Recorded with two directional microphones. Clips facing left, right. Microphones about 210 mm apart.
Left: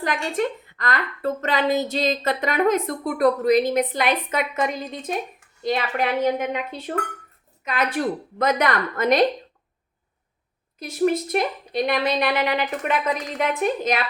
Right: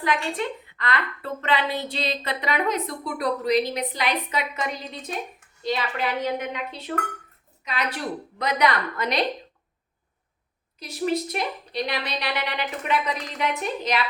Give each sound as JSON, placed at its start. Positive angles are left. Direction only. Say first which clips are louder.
{"t": 0.0, "sound": "a woman's voice", "louder": "left 2 dB", "side_deg": 45}
{"t": 10.8, "sound": "a woman's voice", "louder": "left 4 dB", "side_deg": 50}